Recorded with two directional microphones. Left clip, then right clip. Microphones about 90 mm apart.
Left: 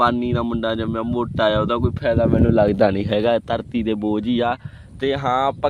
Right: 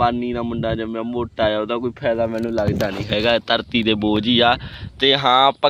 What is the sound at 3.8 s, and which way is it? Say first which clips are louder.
Speech: right 3 dB; 10° left (ahead or behind).